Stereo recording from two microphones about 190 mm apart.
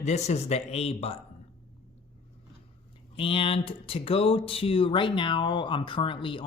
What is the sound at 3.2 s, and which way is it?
Speech, 30° left (ahead or behind).